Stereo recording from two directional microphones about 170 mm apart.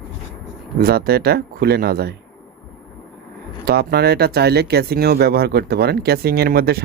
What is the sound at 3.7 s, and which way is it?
Speech, 65° right (ahead or behind).